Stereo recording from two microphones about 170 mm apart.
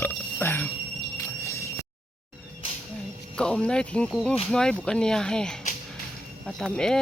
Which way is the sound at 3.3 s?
5° left (ahead or behind).